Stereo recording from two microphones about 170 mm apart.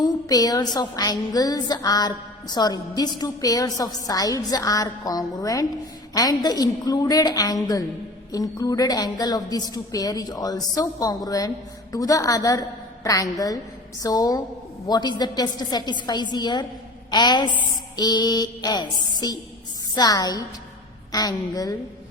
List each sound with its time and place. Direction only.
0.0 s a woman's voice: 20° left (ahead or behind)